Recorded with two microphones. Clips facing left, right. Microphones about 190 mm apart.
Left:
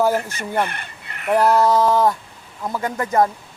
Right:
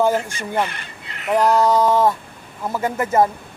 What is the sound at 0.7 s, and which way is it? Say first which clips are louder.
Crow: left 1 dB; 55° left (ahead or behind).